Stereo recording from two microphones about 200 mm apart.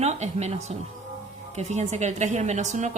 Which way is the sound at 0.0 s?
35° right (ahead or behind).